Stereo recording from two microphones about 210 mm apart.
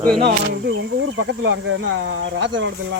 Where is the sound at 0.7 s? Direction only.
65° right (ahead or behind).